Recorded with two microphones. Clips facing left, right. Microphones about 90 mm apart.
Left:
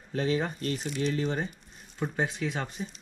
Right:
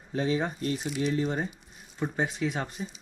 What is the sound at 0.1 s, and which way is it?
Speech, 15° right (ahead or behind).